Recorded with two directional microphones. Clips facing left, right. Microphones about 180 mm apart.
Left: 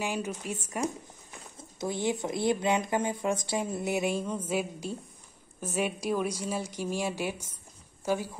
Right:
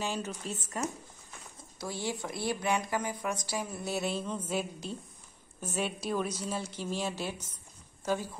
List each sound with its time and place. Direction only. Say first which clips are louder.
0.0 s a woman's voice: left 3 dB; 10° left (ahead or behind)